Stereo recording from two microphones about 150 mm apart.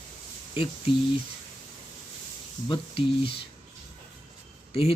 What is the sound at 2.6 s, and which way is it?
Speech, 35° left (ahead or behind).